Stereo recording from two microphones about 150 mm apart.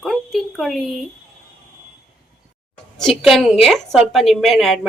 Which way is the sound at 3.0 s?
Centre (ahead or behind).